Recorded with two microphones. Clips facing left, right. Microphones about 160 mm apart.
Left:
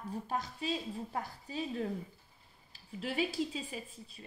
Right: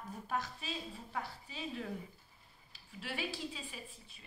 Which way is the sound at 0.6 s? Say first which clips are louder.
Left 8 dB; 35° left (ahead or behind).